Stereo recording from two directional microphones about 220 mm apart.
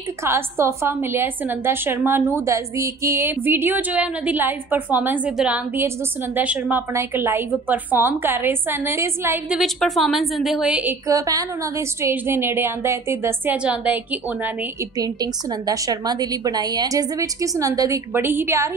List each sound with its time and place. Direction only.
0.2 s a woman's voice: 10° right (ahead or behind)
15.0 s a woman's voice: 15° right (ahead or behind)